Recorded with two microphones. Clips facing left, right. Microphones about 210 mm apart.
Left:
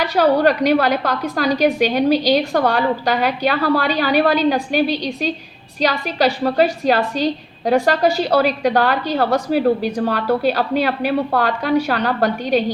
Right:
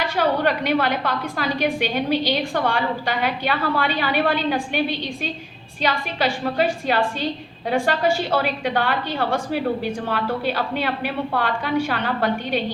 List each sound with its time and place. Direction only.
0.0 s a woman's voice: 40° left (ahead or behind)